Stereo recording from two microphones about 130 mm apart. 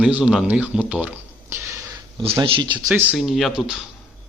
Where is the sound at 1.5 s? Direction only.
20° right (ahead or behind).